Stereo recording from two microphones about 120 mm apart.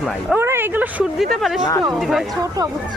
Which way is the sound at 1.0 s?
Centre (ahead or behind).